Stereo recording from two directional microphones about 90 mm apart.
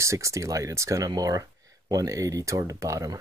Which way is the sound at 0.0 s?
35° right (ahead or behind).